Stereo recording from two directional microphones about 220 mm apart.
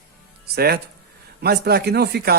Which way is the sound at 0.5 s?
45° right (ahead or behind).